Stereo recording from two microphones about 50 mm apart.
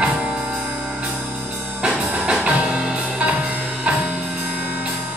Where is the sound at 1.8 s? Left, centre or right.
Right.